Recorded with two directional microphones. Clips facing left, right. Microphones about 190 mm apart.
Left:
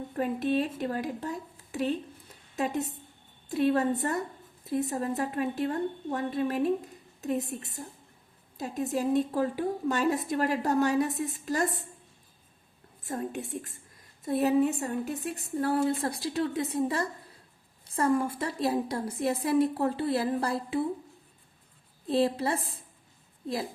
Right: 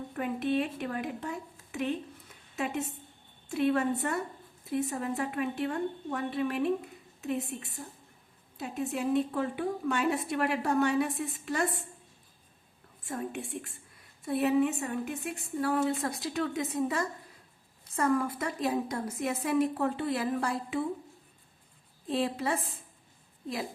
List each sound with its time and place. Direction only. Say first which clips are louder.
0.2 s a woman's voice: left 2 dB; 35° left (ahead or behind)
13.1 s a woman's voice: left 2 dB; 40° left (ahead or behind)
22.1 s a woman's voice: left 4 dB; 35° left (ahead or behind)